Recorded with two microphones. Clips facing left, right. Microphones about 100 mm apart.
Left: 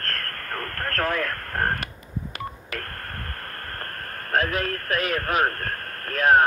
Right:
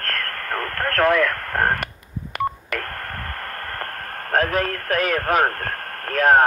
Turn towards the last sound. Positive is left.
turn(degrees=-40)  # may be behind; listen again after turning